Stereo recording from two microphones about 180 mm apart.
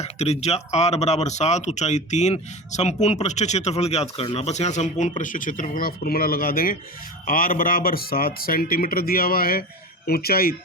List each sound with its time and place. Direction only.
0.0 s speech: 35° left (ahead or behind); by 10.5 s 60° left (ahead or behind)